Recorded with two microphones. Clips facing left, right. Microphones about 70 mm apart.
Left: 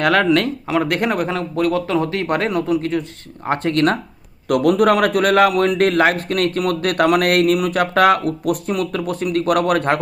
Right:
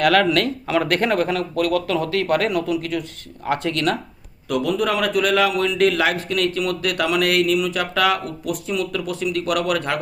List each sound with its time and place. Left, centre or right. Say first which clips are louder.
0.0 s speech: left 1 dB; left
4.4 s a man's voice: left 7 dB; left